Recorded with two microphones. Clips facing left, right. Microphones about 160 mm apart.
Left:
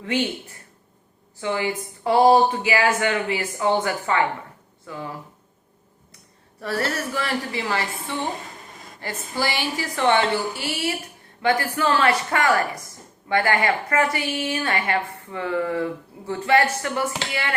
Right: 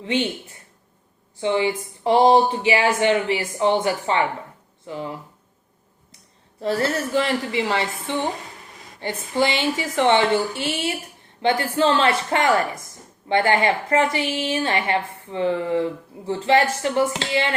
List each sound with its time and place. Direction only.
1.4 s a woman's voice: 20° right (ahead or behind)
6.6 s a woman's voice: 20° right (ahead or behind)